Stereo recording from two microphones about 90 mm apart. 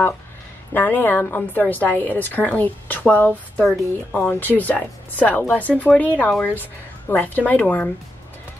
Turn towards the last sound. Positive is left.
turn(degrees=20)  # may be behind; listen again after turning